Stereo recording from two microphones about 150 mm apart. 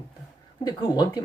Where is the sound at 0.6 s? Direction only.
30° left (ahead or behind).